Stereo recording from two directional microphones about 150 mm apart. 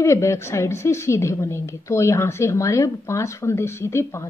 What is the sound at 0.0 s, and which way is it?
A woman's voice, 20° left (ahead or behind).